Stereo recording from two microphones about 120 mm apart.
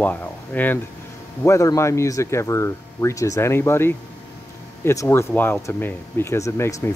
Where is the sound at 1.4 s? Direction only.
25° left (ahead or behind).